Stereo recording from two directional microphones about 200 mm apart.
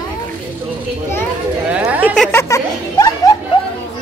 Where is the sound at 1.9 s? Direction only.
10° right (ahead or behind).